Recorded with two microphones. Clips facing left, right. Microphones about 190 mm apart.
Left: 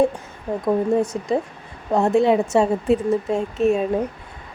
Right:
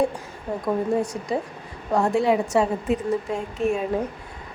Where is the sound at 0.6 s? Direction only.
25° left (ahead or behind).